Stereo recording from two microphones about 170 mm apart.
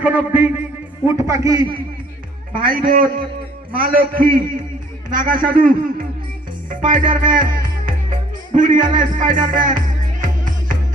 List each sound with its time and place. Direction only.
0.0 s a man's voice: 10° right (ahead or behind)
2.5 s a man's voice: 55° right (ahead or behind)
6.7 s music: 50° right (ahead or behind)
8.5 s music: 50° right (ahead or behind)